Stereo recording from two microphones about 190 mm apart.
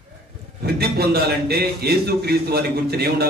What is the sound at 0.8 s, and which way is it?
A man's voice, 55° right (ahead or behind).